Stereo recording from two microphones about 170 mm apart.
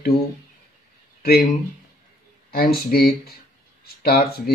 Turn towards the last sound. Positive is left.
turn(degrees=65)  # may be behind; listen again after turning